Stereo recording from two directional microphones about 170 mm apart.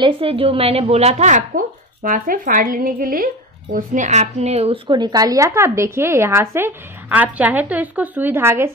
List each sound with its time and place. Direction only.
0.0 s a woman's voice: 35° right (ahead or behind)
2.0 s a woman's voice: 55° right (ahead or behind); by 4.7 s 40° right (ahead or behind)
4.8 s a woman's voice: 25° right (ahead or behind)